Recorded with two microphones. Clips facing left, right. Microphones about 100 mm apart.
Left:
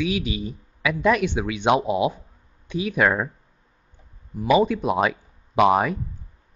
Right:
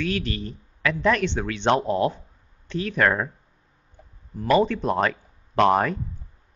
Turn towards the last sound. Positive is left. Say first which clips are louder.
# left 1 dB
turn(degrees=10)  # may be behind; listen again after turning